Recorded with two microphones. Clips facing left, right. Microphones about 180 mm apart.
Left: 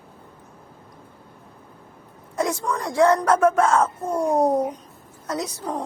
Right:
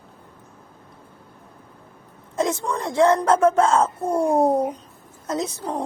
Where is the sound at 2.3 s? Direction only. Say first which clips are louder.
Right 1 dB; 20° right (ahead or behind).